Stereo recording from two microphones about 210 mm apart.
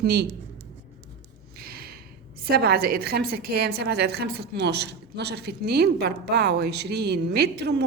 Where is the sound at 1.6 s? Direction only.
45° right (ahead or behind).